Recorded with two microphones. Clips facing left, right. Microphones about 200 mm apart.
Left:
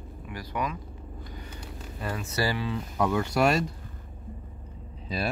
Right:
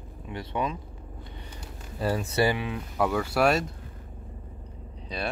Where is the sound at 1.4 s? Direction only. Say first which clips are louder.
Left 2 dB; 30° right (ahead or behind).